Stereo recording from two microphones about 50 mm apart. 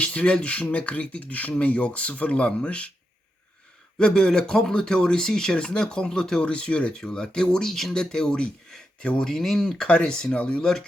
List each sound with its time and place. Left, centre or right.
0.0 s speech: left
3.9 s speech: centre
7.7 s speech: centre; by 9.2 s left
9.2 s speech: centre; by 10.7 s left